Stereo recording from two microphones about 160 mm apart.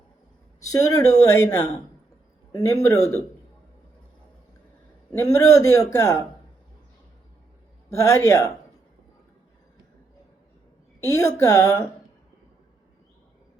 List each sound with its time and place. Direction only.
0.7 s a woman's voice: 20° left (ahead or behind)
5.1 s a woman's voice: 20° left (ahead or behind)
7.9 s speech: 15° left (ahead or behind)
11.0 s a woman's voice: 20° left (ahead or behind)